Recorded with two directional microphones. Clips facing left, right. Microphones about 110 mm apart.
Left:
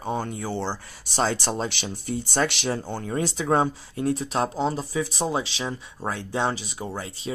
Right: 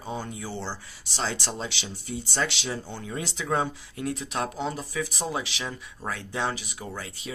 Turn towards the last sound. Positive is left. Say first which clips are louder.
# left 5 dB
turn(degrees=30)  # may be behind; listen again after turning